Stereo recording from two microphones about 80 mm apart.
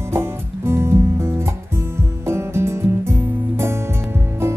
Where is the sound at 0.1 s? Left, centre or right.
Right.